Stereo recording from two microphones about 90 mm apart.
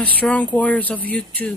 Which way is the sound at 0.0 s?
15° left (ahead or behind).